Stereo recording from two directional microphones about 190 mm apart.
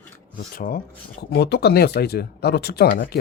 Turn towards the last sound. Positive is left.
turn(degrees=55)  # may be behind; listen again after turning